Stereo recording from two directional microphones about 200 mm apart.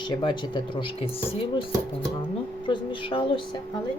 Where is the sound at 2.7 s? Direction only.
25° left (ahead or behind).